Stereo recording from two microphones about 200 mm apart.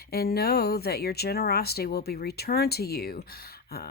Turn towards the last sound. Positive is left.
turn(degrees=50)  # may be behind; listen again after turning